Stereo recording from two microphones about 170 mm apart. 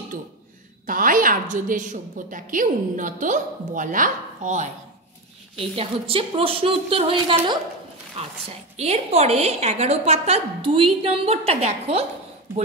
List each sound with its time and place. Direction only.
0.8 s a woman's voice: 55° right (ahead or behind)
5.8 s a woman's voice: 35° right (ahead or behind)